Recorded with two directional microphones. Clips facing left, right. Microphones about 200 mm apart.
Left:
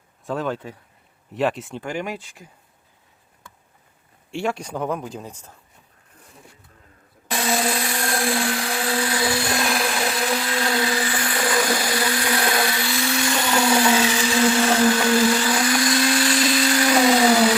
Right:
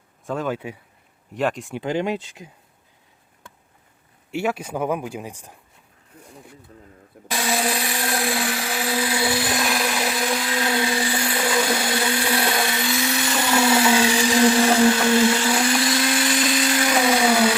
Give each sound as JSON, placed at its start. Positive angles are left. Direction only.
{"t": 0.3, "sound": "speech", "side_deg": 0}
{"t": 1.3, "sound": "speech", "side_deg": 0}
{"t": 1.7, "sound": "speech", "side_deg": -20}
{"t": 4.3, "sound": "speech", "side_deg": -5}
{"t": 7.3, "sound": "blender", "side_deg": 0}
{"t": 17.2, "sound": "a sound", "side_deg": 5}